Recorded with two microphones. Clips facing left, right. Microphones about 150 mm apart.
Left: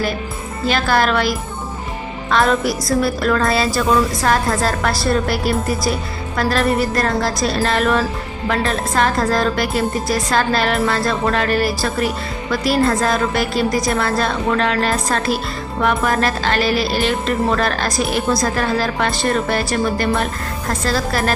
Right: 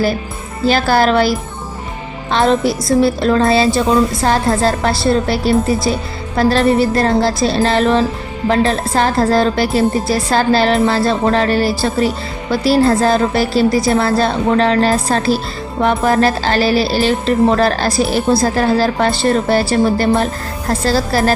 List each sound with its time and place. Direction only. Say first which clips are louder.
0.7 s speech: right 4 dB; 35° right (ahead or behind)
2.3 s a woman's voice: right 3 dB; 25° right (ahead or behind)